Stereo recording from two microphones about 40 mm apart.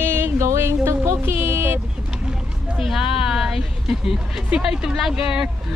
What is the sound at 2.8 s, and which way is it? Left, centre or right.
Speech, centre.